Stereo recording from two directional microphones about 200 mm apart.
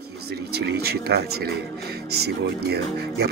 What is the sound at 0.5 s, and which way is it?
Speech, 50° right (ahead or behind).